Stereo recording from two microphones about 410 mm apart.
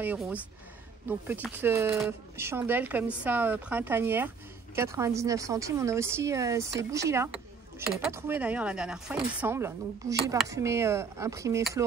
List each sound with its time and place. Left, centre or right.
0.0 s speech: centre